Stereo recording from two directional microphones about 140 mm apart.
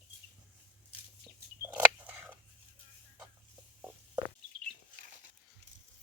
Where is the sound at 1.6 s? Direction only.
15° right (ahead or behind).